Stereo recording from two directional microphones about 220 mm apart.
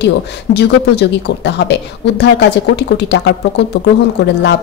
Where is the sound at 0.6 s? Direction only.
50° left (ahead or behind).